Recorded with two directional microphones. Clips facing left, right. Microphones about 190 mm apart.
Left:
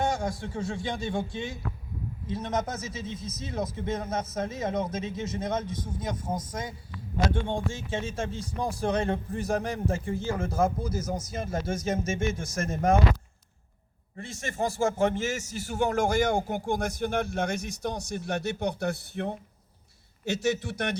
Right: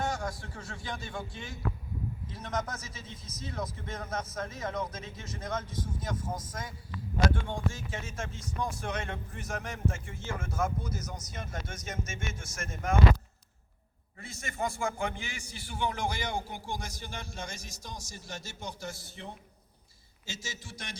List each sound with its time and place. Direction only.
0.0 s a man's voice: 25° left (ahead or behind)
14.4 s a man's voice: 35° left (ahead or behind); by 20.9 s 65° left (ahead or behind)